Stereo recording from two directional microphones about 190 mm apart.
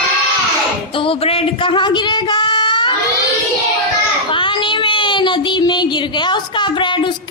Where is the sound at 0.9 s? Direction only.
30° left (ahead or behind).